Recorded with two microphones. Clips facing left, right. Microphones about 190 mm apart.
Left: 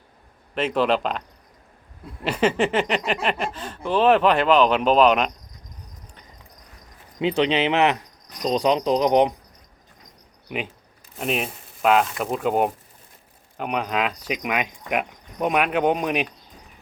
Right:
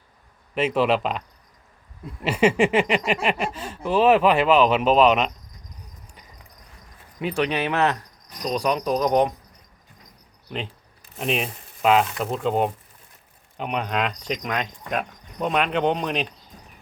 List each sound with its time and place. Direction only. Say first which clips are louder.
0.5 s speech: even; 5° right (ahead or behind)
2.2 s speech: right 2 dB; 10° right (ahead or behind)
7.2 s speech: left 3 dB; 20° left (ahead or behind)
10.5 s speech: left 2 dB; 15° left (ahead or behind)
11.2 s speech: even; centre (ahead or behind)